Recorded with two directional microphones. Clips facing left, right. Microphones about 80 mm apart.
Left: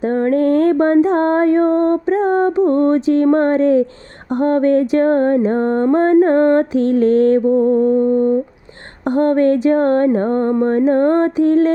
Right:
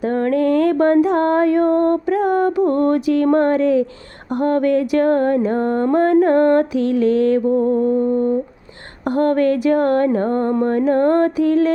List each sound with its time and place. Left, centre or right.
0.0 s a sound: left
3.2 s speech: left
4.3 s mantra: left